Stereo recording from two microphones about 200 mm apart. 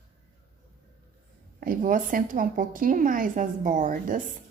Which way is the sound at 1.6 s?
45° right (ahead or behind).